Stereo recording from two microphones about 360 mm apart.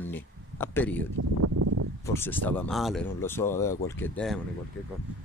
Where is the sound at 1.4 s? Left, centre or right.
Right.